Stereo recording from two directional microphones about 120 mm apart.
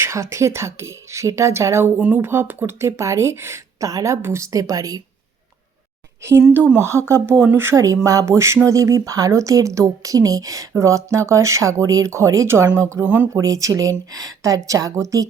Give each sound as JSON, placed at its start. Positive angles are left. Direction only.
{"t": 0.0, "sound": "speech", "side_deg": -25}
{"t": 6.5, "sound": "speech", "side_deg": -15}
{"t": 13.3, "sound": "speech", "side_deg": -30}